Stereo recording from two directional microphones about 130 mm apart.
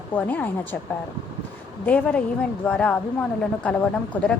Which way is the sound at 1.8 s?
15° left (ahead or behind).